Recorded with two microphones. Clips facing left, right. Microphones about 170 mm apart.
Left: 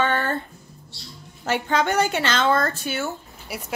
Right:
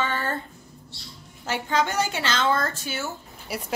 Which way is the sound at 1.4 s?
60° left (ahead or behind).